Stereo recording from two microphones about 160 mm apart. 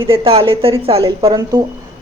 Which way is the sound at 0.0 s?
35° right (ahead or behind).